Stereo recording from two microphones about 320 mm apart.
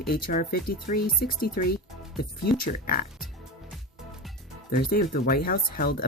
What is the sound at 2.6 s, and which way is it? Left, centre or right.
Speech, left.